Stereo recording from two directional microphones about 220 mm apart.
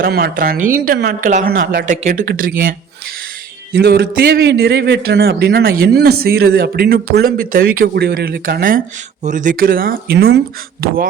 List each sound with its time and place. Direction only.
0.0 s a man's voice: 40° right (ahead or behind)
3.7 s a man's voice: 45° right (ahead or behind)